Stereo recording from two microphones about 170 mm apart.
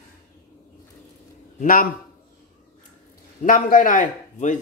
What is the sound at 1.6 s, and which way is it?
Speech, 55° left (ahead or behind).